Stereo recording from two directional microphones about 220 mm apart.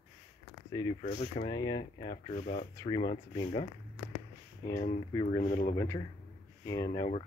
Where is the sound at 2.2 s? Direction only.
30° left (ahead or behind).